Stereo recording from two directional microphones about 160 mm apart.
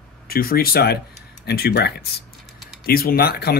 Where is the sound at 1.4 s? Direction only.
90° left.